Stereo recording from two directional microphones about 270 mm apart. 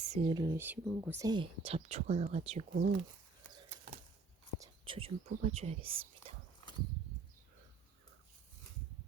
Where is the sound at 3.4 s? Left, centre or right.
Centre.